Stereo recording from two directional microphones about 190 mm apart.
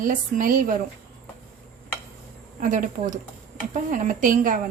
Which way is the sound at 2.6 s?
45° right (ahead or behind).